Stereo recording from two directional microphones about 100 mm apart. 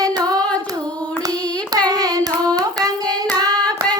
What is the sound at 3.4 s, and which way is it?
Hands, 40° right (ahead or behind).